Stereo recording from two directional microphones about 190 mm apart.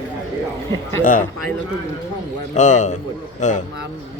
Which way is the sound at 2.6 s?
40° left (ahead or behind).